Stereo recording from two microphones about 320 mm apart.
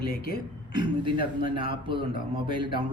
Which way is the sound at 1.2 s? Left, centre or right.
Left.